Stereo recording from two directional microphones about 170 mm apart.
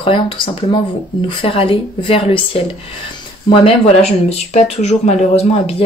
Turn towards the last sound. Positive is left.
turn(degrees=35)  # may be behind; listen again after turning